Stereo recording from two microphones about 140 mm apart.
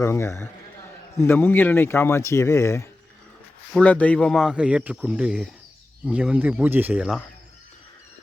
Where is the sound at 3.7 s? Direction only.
10° left (ahead or behind); by 7.2 s 5° right (ahead or behind).